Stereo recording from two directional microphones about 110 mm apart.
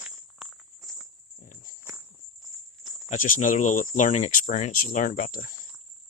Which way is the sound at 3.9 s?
90° left.